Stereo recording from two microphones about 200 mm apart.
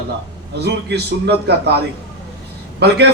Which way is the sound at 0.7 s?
55° right (ahead or behind).